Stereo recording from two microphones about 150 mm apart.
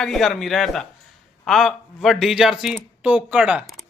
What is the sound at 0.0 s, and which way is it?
A man's voice, 5° left (ahead or behind).